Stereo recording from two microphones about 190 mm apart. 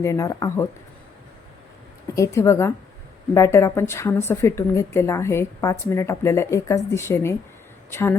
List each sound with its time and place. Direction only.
0.0 s a woman's voice: 15° left (ahead or behind)
2.1 s a woman's voice: 15° left (ahead or behind)